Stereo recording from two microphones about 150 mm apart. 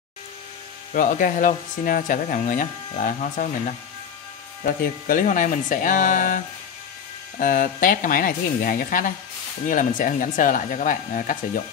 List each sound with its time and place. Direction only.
0.9 s speech: 65° left (ahead or behind)
5.0 s speech: 65° left (ahead or behind)